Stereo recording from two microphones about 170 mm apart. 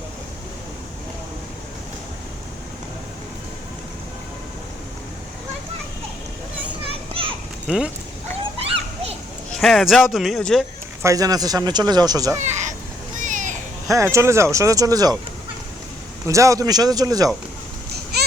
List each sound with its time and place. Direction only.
7.1 s children playing: 35° right (ahead or behind)
9.6 s speech: centre (ahead or behind)
11.0 s speech: 20° right (ahead or behind)
12.4 s a sound: 45° right (ahead or behind)
13.8 s speech: 20° right (ahead or behind)
16.2 s speech: 20° right (ahead or behind)
18.1 s baby cry: 70° right (ahead or behind)